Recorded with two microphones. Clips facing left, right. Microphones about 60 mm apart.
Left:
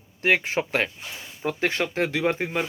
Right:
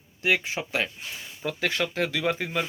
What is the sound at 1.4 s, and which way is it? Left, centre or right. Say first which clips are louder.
Speech: left 2 dB; left.